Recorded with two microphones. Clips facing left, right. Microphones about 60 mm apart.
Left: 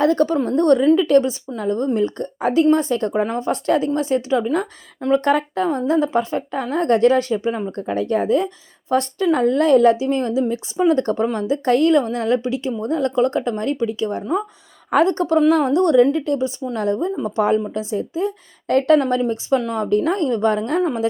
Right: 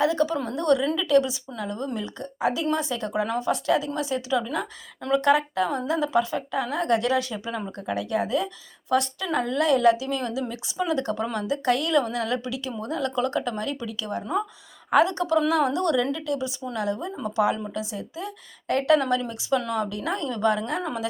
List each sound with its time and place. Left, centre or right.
0.0 s speech: left
5.2 s speech: left
14.8 s speech: left
20.8 s speech: left